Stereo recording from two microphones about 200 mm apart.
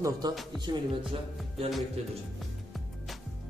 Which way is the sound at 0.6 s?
20° right (ahead or behind).